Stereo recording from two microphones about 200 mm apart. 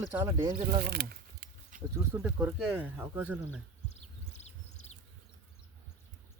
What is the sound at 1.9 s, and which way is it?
Speech, 15° right (ahead or behind).